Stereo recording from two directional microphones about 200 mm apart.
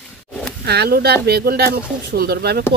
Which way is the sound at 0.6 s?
55° right (ahead or behind).